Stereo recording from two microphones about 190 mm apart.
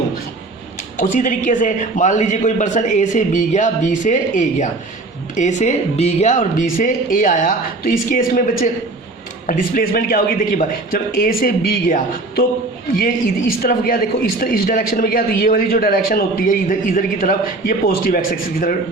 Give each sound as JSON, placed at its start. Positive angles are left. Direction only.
{"t": 0.9, "sound": "a man's voice", "side_deg": 45}
{"t": 13.6, "sound": "a man's voice", "side_deg": 50}